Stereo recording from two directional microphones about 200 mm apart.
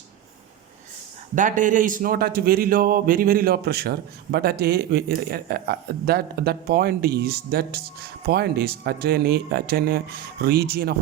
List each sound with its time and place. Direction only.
1.4 s speech: 40° right (ahead or behind)